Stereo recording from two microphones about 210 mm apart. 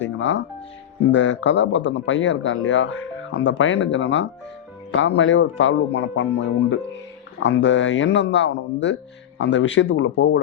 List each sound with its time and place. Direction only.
0.0 s music: 60° left (ahead or behind)
1.1 s speech: 60° left (ahead or behind)